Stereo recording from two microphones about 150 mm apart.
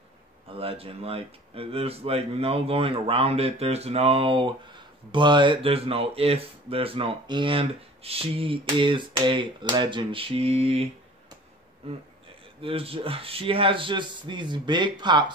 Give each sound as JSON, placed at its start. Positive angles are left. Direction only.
{"t": 0.5, "sound": "speech", "side_deg": -40}
{"t": 12.6, "sound": "speech", "side_deg": -40}